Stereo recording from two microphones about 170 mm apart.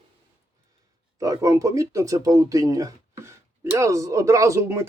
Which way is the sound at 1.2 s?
20° right (ahead or behind).